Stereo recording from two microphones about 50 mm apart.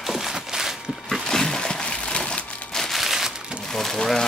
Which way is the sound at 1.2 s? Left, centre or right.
Centre.